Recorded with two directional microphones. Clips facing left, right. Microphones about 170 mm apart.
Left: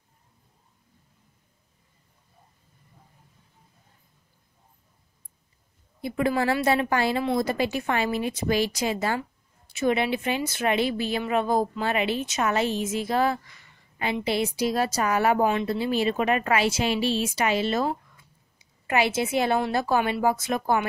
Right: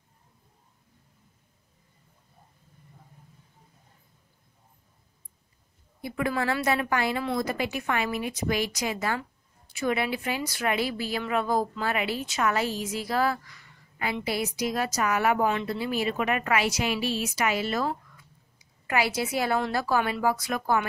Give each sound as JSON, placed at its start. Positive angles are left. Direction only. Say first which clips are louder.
{"t": 6.0, "sound": "a woman's voice", "louder": "left 4 dB", "side_deg": 30}